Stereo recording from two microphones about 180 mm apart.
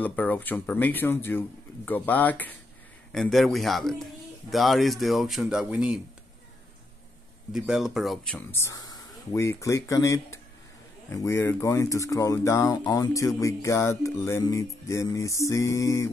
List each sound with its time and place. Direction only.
0.0 s speech: 10° left (ahead or behind)
7.5 s speech: 5° right (ahead or behind); by 16.1 s 15° left (ahead or behind)